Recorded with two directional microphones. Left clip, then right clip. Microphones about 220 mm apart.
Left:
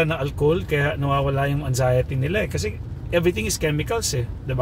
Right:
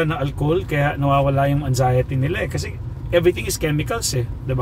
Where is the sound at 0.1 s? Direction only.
Centre (ahead or behind).